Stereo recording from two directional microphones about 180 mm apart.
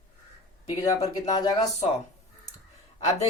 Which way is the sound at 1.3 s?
20° left (ahead or behind).